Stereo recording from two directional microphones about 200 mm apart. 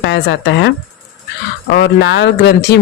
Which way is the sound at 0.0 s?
60° left (ahead or behind).